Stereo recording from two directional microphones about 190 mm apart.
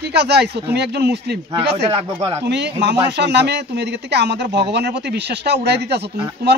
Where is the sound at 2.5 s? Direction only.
65° right (ahead or behind).